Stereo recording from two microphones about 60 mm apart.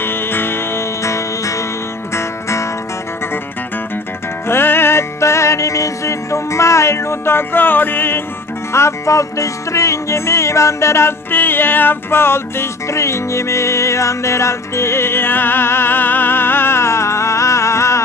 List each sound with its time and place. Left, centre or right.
0.0 s music: left
4.5 s music: left
8.7 s music: left